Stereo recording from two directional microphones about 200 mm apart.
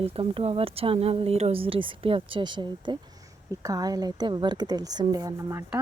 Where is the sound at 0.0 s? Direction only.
30° right (ahead or behind).